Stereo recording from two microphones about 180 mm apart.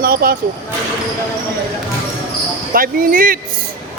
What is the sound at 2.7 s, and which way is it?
Speech, 55° right (ahead or behind).